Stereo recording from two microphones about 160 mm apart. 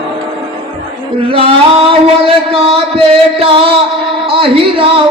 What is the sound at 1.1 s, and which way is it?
Male singing, 35° right (ahead or behind).